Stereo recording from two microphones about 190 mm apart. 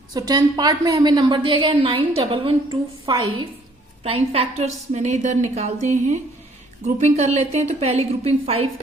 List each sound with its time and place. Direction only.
0.1 s a woman's voice: 20° right (ahead or behind)